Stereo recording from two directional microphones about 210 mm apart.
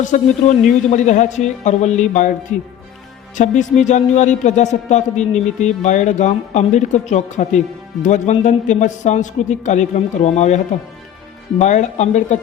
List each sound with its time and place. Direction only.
0.0 s speech: 35° left (ahead or behind)
3.3 s speech: 35° left (ahead or behind)
11.6 s speech: 35° left (ahead or behind)